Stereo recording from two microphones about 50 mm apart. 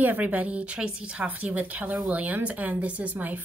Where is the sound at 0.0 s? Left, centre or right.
Right.